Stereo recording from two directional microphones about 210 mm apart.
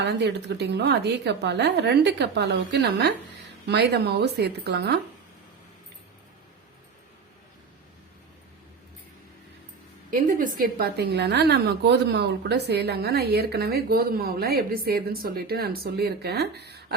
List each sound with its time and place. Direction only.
0.0 s a woman's voice: 55° right (ahead or behind)
10.1 s a woman's voice: 40° right (ahead or behind)